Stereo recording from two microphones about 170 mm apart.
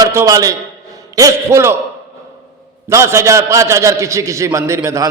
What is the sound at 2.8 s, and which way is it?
A man's voice, 15° right (ahead or behind).